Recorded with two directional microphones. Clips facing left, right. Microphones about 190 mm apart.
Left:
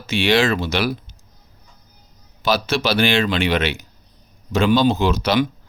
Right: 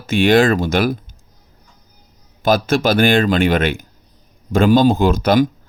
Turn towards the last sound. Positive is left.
turn(degrees=-50)  # may be behind; listen again after turning